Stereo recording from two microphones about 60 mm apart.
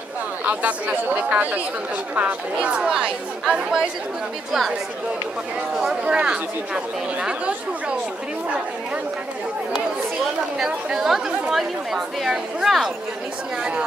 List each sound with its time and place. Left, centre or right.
0.5 s speech: right
4.5 s speech: centre
5.8 s speech: centre
10.6 s speech: centre
13.6 s speech: centre